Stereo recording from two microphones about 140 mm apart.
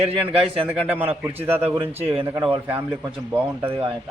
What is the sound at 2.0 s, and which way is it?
Speech, 45° right (ahead or behind).